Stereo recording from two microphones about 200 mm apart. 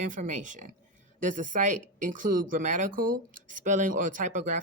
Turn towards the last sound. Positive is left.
turn(degrees=-35)  # may be behind; listen again after turning